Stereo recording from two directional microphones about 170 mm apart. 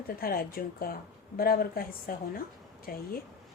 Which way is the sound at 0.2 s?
60° left (ahead or behind).